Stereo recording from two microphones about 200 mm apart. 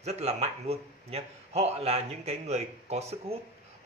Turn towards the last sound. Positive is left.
turn(degrees=-30)  # may be behind; listen again after turning